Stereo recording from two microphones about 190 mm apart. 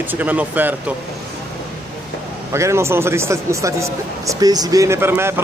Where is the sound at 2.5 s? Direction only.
15° right (ahead or behind).